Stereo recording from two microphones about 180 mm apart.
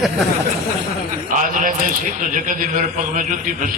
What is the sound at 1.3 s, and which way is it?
A man's voice, 45° right (ahead or behind).